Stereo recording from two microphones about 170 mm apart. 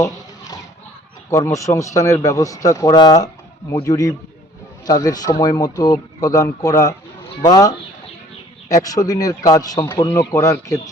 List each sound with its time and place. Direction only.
1.3 s a man's voice: 20° left (ahead or behind)